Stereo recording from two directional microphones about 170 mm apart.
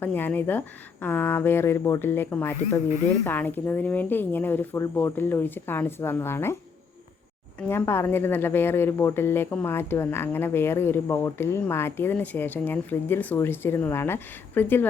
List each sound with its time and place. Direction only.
0.0 s speech: 10° left (ahead or behind)
7.7 s speech: 15° left (ahead or behind)